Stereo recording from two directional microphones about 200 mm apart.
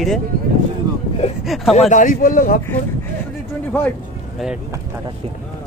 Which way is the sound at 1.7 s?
35° left (ahead or behind).